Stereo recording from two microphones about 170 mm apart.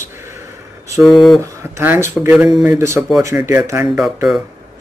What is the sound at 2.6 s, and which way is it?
Speech, 15° right (ahead or behind).